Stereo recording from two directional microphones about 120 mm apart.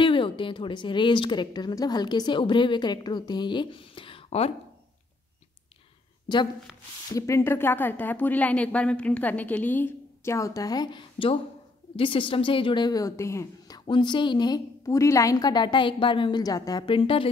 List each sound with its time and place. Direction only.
0.0 s a woman's voice: 45° left (ahead or behind)
6.2 s a woman's voice: 40° left (ahead or behind)
7.2 s a woman's voice: 25° left (ahead or behind)
13.8 s a woman's voice: 40° left (ahead or behind)
16.8 s a woman's voice: 45° left (ahead or behind)